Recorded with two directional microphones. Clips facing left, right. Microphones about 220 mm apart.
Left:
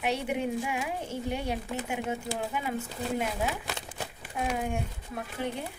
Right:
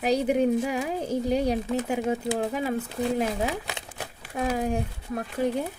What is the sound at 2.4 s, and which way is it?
Speech, 35° right (ahead or behind).